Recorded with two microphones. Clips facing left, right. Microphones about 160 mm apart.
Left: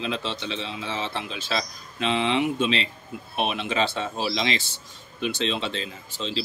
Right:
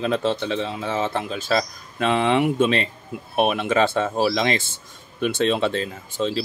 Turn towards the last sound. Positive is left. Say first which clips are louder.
# right 7 dB
turn(degrees=-50)  # may be behind; listen again after turning